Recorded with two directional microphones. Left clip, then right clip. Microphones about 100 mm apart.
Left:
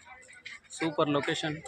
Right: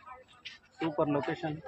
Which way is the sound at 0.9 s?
55° left (ahead or behind).